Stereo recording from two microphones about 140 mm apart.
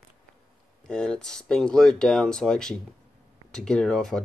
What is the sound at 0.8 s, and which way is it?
Speech, 5° left (ahead or behind).